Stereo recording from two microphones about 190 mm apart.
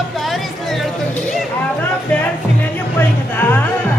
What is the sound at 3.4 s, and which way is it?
Music, 10° left (ahead or behind).